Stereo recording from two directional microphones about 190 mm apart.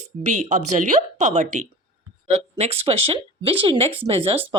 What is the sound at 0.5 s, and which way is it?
A woman's voice, 40° right (ahead or behind).